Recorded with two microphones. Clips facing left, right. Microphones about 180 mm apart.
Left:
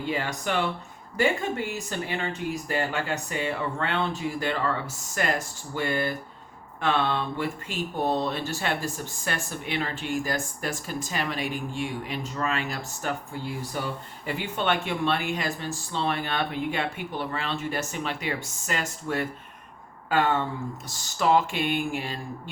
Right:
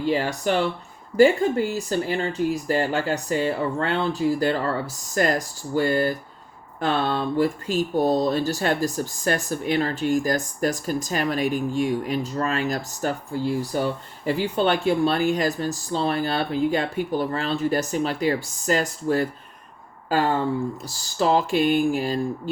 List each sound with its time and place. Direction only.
0.0 s speech: 35° right (ahead or behind)